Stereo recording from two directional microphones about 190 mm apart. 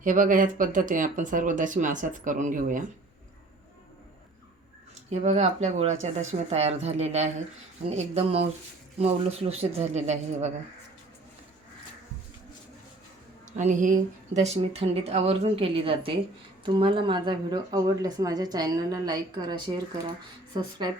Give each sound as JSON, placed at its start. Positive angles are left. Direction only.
{"t": 0.0, "sound": "speech", "side_deg": -45}
{"t": 5.2, "sound": "speech", "side_deg": -40}
{"t": 13.6, "sound": "speech", "side_deg": -40}